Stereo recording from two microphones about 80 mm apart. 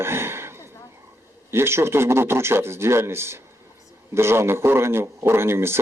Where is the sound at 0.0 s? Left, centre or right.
Right.